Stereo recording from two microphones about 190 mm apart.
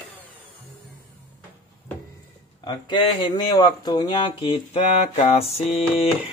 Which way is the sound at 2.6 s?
25° left (ahead or behind).